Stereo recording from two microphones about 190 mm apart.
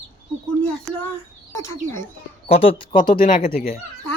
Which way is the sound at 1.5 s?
15° left (ahead or behind).